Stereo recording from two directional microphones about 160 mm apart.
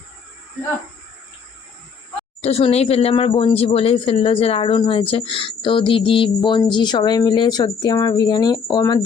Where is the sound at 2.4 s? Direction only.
40° left (ahead or behind).